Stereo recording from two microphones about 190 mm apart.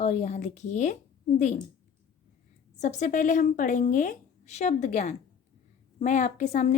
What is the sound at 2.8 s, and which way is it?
Speech, 40° left (ahead or behind).